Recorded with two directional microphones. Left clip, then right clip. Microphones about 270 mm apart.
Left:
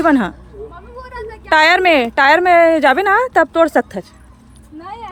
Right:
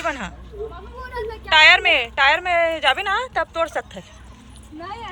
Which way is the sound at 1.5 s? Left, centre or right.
Left.